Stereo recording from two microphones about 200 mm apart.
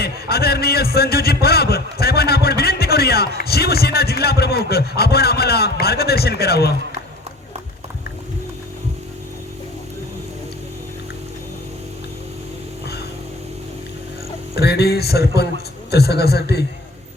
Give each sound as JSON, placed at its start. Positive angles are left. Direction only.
{"t": 0.0, "sound": "a man's voice", "side_deg": 50}
{"t": 14.5, "sound": "music", "side_deg": 55}